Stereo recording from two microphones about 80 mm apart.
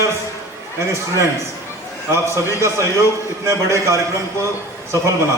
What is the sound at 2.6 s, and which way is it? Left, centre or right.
A man's voice, right.